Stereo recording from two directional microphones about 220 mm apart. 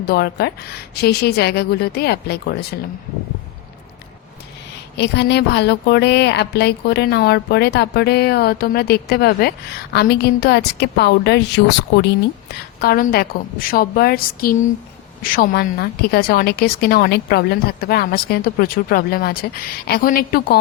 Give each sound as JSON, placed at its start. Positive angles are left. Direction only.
{"t": 0.0, "sound": "a woman's voice", "side_deg": 45}
{"t": 4.9, "sound": "a woman's voice", "side_deg": 50}
{"t": 12.8, "sound": "a woman's voice", "side_deg": 45}